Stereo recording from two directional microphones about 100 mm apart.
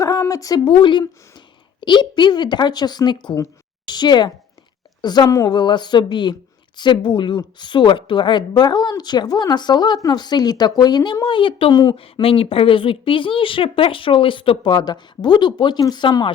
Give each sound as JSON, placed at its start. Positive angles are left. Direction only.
{"t": 0.0, "sound": "a sound", "side_deg": 35}
{"t": 0.6, "sound": "a woman's voice", "side_deg": 55}
{"t": 5.5, "sound": "speech", "side_deg": 50}
{"t": 12.2, "sound": "a woman's voice", "side_deg": 65}